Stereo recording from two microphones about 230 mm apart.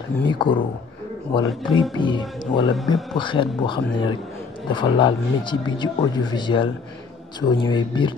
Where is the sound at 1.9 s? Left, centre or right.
Centre.